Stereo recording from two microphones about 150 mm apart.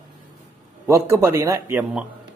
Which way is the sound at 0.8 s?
20° right (ahead or behind).